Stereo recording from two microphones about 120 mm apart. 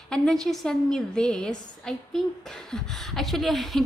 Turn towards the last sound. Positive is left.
turn(degrees=0)  # may be behind; listen again after turning